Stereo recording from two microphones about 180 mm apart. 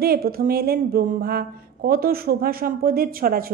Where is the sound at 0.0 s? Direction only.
55° right (ahead or behind).